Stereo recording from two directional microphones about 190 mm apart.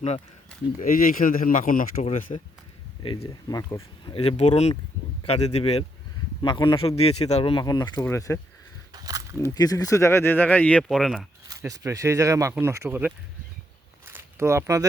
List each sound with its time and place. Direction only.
0.8 s speech: 50° left (ahead or behind)
3.5 s speech: 15° left (ahead or behind)
8.9 s a sound: 20° right (ahead or behind)
9.6 s speech: 20° left (ahead or behind); by 11.3 s centre (ahead or behind)
11.4 s speech: 20° right (ahead or behind)
14.1 s zipper: 15° right (ahead or behind)